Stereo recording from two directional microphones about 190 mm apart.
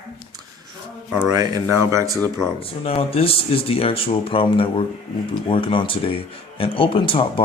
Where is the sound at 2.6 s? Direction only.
30° left (ahead or behind).